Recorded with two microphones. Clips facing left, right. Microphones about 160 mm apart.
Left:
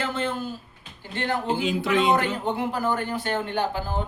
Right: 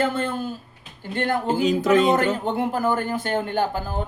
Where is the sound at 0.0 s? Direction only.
50° right (ahead or behind).